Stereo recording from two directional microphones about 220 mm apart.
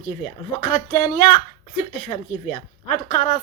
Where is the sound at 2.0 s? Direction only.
30° left (ahead or behind).